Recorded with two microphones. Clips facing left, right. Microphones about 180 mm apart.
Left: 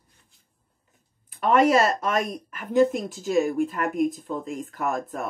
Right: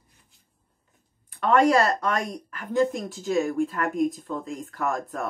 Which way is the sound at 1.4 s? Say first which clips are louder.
Left 1 dB; 20° left (ahead or behind).